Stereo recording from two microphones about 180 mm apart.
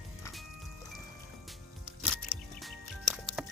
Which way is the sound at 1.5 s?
Centre (ahead or behind).